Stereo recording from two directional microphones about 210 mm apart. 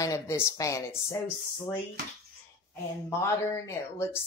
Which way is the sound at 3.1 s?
15° left (ahead or behind).